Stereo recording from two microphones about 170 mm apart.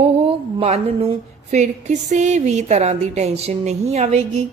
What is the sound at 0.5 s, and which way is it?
A woman's voice, 35° right (ahead or behind).